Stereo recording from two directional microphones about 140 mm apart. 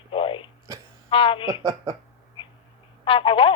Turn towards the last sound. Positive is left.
turn(degrees=40)  # may be behind; listen again after turning